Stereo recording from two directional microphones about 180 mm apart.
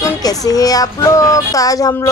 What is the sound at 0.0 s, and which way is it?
Speech, 20° left (ahead or behind).